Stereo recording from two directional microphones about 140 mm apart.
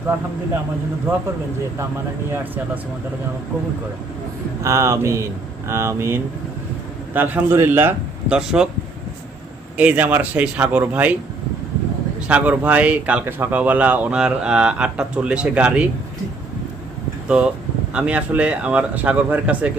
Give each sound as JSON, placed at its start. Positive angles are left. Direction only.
{"t": 4.6, "sound": "speech", "side_deg": -20}
{"t": 9.7, "sound": "speech", "side_deg": -10}
{"t": 12.3, "sound": "speech", "side_deg": -10}
{"t": 17.2, "sound": "speech", "side_deg": -5}